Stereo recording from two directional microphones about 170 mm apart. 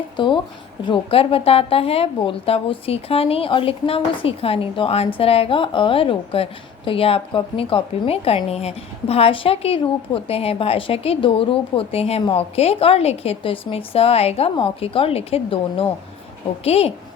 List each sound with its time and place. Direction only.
0.2 s speech: 30° left (ahead or behind)